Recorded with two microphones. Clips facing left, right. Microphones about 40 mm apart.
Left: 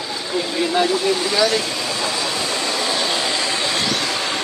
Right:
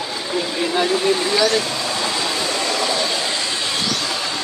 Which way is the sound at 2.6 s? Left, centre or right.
Right.